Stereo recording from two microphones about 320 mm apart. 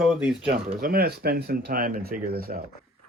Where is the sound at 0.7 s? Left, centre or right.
Right.